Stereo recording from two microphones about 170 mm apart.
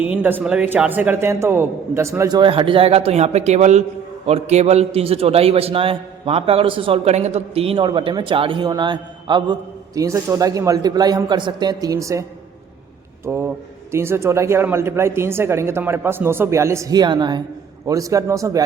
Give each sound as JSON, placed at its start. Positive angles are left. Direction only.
{"t": 0.0, "sound": "a man's voice", "side_deg": -10}
{"t": 13.2, "sound": "a man's voice", "side_deg": -15}